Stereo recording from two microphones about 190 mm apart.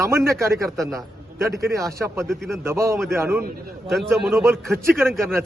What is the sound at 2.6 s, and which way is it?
Speech, 15° right (ahead or behind).